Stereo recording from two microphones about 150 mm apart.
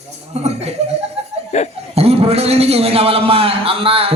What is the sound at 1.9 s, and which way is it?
A man's voice, 40° right (ahead or behind).